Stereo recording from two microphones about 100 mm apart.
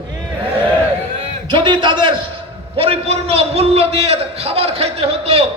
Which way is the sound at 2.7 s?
75° right (ahead or behind).